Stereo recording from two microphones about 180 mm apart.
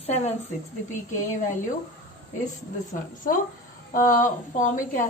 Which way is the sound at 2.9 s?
45° left (ahead or behind).